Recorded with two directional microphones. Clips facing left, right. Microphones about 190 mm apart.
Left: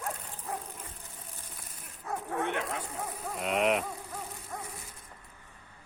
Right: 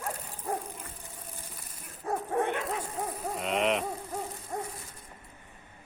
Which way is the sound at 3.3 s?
Centre (ahead or behind).